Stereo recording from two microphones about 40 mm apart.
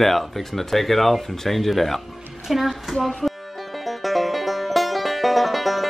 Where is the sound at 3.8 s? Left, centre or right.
Centre.